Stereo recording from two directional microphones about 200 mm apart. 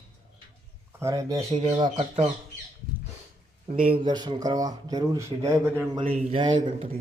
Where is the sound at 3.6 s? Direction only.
45° right (ahead or behind).